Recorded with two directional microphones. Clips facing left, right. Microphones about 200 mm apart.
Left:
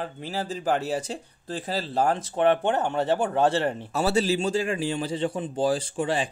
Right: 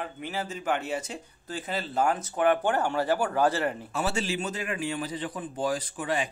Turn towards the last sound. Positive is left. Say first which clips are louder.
# left 4 dB
turn(degrees=30)  # may be behind; listen again after turning